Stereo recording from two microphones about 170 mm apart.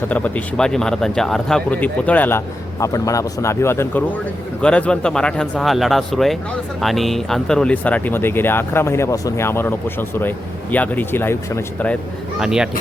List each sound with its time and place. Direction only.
0.1 s speech: 10° left (ahead or behind)
12.4 s speech: 5° right (ahead or behind)